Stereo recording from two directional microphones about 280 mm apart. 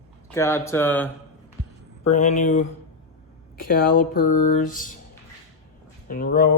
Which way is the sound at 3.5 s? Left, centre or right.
Left.